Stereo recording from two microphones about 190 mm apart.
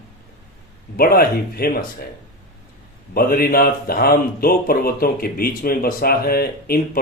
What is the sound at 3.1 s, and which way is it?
A man's voice, 50° left (ahead or behind).